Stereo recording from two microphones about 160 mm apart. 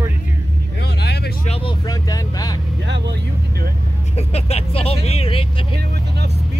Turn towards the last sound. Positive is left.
turn(degrees=-90)